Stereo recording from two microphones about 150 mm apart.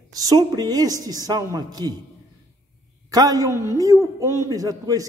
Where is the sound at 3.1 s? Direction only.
25° right (ahead or behind).